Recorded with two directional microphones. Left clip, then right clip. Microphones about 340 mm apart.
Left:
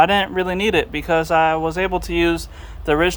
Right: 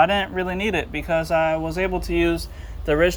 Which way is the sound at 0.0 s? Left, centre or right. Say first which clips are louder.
Left 3 dB; centre.